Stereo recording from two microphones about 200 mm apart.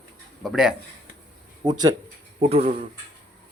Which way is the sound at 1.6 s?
20° right (ahead or behind).